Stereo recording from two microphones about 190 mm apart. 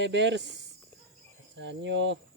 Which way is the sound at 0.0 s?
70° right (ahead or behind).